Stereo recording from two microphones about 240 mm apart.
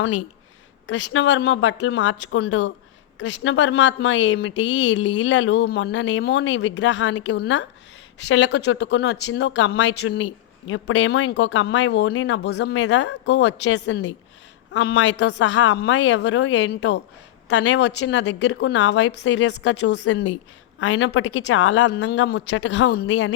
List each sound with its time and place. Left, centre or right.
0.9 s a woman's voice: left
21.9 s speech: left